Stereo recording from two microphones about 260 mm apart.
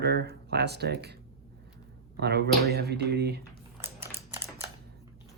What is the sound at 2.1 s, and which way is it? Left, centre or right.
Speech, right.